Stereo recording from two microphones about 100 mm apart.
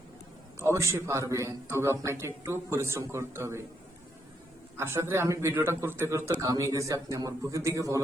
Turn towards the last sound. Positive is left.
turn(degrees=-35)  # may be behind; listen again after turning